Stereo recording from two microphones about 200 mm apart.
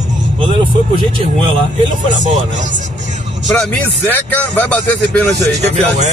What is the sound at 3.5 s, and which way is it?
Speech, 5° left (ahead or behind).